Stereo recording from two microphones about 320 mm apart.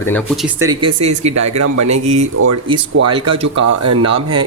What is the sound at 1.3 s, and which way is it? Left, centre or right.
Speech, right.